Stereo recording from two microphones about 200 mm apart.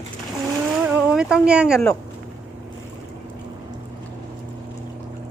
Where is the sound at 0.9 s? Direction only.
5° right (ahead or behind).